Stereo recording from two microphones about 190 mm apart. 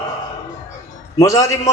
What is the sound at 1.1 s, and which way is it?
Speech, 15° left (ahead or behind).